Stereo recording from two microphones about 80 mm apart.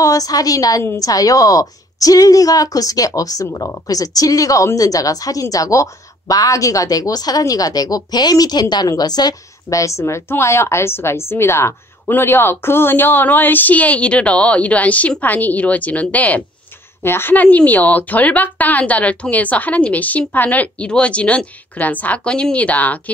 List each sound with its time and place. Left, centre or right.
0.0 s a woman's voice: left; by 16.4 s centre
17.0 s speech: left